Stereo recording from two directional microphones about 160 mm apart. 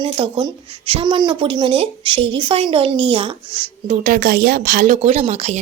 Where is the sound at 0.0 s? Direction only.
30° right (ahead or behind).